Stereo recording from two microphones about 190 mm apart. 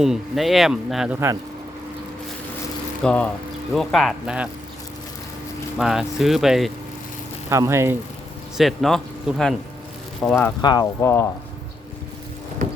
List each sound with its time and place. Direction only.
0.0 s speech: centre (ahead or behind)
3.0 s speech: 5° left (ahead or behind)
5.8 s speech: centre (ahead or behind)
7.5 s speech: 15° right (ahead or behind)
8.5 s speech: centre (ahead or behind)
10.6 s speech: 20° left (ahead or behind)